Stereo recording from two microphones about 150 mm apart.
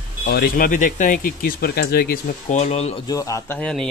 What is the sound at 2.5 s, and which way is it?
Speech, 45° left (ahead or behind).